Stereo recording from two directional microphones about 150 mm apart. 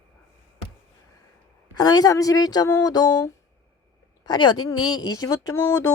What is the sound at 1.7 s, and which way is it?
A woman's voice, 25° left (ahead or behind).